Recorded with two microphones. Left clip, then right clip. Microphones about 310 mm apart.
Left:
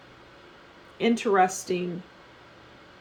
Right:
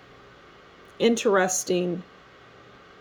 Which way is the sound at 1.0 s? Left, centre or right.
Right.